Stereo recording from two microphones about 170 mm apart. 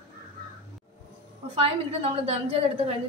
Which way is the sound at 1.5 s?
35° right (ahead or behind).